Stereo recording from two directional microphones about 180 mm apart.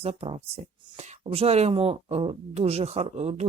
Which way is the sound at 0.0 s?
35° right (ahead or behind).